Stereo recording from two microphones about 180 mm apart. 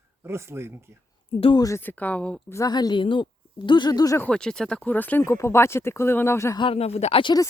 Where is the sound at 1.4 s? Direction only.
25° left (ahead or behind); by 2.6 s 5° left (ahead or behind).